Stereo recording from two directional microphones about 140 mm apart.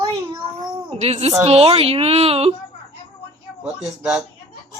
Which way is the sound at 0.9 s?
50° right (ahead or behind).